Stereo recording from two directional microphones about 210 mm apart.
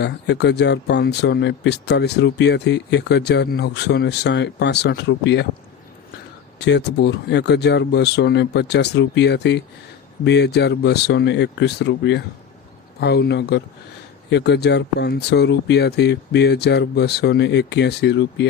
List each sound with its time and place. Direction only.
0.0 s speech: 55° left (ahead or behind)
6.6 s speech: 55° left (ahead or behind)